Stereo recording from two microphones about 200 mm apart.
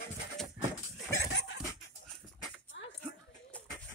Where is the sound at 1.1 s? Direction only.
60° left (ahead or behind).